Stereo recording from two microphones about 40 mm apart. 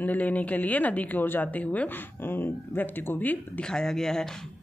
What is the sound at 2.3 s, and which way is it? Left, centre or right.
Speech, left.